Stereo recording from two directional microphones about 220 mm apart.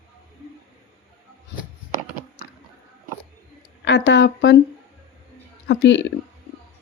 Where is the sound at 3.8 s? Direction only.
55° left (ahead or behind).